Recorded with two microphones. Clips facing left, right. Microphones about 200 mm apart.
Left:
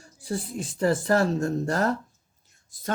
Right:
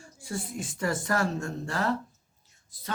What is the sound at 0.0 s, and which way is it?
A woman's voice, 35° left (ahead or behind).